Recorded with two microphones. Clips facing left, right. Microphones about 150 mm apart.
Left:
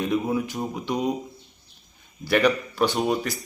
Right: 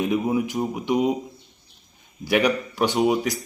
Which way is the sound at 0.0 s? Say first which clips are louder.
Right 2 dB; 15° right (ahead or behind).